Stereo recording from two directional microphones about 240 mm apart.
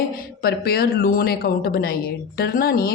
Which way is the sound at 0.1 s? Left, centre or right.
Left.